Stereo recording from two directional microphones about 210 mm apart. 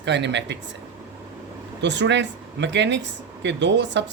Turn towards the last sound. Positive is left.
turn(degrees=-55)  # may be behind; listen again after turning